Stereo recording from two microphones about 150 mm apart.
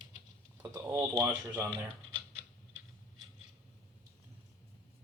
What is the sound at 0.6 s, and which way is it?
Speech, 15° right (ahead or behind).